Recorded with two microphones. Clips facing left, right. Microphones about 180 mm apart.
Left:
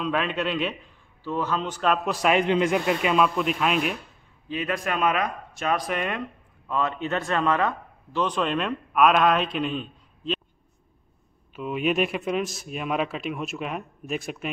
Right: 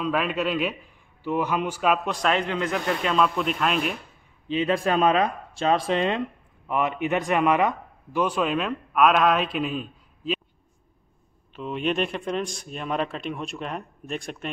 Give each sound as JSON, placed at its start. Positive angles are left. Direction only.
{"t": 0.0, "sound": "a man's voice", "side_deg": -5}
{"t": 2.0, "sound": "a man's voice", "side_deg": 10}
{"t": 4.5, "sound": "a man's voice", "side_deg": -25}
{"t": 11.5, "sound": "a man's voice", "side_deg": 5}